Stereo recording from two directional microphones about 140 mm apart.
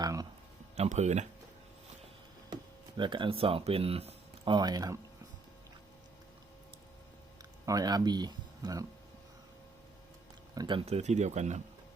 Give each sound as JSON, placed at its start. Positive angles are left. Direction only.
{"t": 0.0, "sound": "a sound", "side_deg": -25}
{"t": 0.8, "sound": "speech", "side_deg": -55}
{"t": 3.0, "sound": "speech", "side_deg": -35}
{"t": 4.5, "sound": "speech", "side_deg": -30}
{"t": 7.6, "sound": "speech", "side_deg": -25}
{"t": 10.5, "sound": "speech", "side_deg": -30}